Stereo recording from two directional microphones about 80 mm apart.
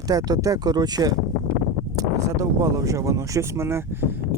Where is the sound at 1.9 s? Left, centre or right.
Right.